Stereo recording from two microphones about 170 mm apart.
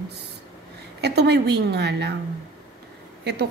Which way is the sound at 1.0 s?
75° right (ahead or behind).